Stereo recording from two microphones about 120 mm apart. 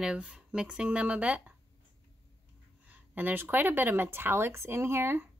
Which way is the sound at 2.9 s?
15° right (ahead or behind).